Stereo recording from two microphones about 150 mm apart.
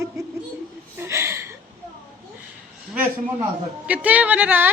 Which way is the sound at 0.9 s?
15° right (ahead or behind).